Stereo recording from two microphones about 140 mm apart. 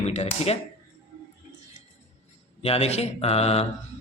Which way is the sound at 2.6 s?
45° left (ahead or behind).